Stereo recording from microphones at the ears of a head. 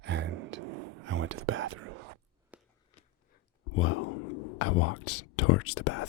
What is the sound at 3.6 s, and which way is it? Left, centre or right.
Whispering, left.